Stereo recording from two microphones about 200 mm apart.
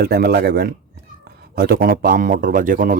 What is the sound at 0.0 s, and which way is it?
Speech, 50° right (ahead or behind).